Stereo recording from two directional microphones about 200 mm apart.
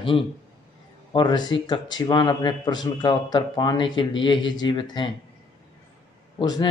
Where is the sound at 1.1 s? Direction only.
20° left (ahead or behind).